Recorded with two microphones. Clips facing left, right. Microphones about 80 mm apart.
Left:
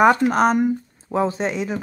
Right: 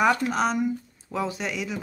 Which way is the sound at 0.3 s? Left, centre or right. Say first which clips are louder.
Left 7 dB; left.